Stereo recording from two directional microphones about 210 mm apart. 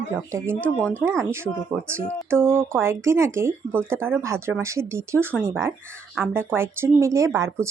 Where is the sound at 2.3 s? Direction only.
10° right (ahead or behind).